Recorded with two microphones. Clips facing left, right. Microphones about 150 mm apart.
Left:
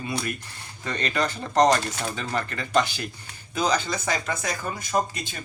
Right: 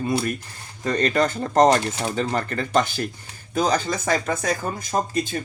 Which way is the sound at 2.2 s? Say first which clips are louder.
Right 5 dB; 40° right (ahead or behind).